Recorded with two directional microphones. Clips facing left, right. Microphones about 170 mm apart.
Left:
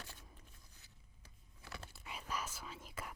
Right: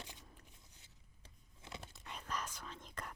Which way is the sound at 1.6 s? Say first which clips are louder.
Right 1 dB; 20° right (ahead or behind).